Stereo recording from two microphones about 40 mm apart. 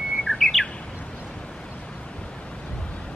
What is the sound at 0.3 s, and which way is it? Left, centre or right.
Bird, left.